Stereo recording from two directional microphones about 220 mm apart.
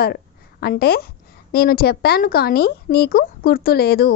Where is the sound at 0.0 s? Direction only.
45° left (ahead or behind).